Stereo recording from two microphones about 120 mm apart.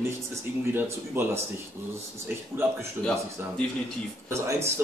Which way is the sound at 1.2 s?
20° right (ahead or behind).